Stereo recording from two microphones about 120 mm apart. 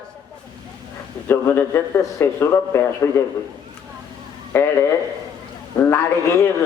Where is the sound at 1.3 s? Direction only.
20° left (ahead or behind).